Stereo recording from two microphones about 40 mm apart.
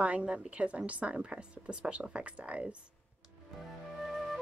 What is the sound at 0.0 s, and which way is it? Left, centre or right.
A woman's voice, right.